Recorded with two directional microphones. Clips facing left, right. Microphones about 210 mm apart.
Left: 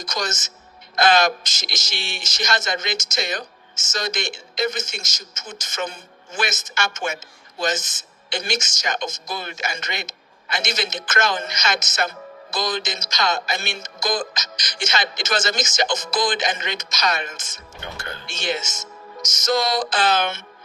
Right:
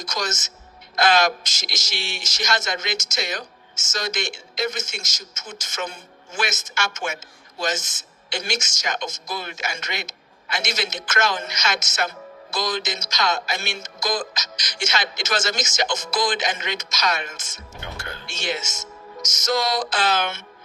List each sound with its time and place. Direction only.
0.0 s speech: centre (ahead or behind)
8.3 s speech: centre (ahead or behind)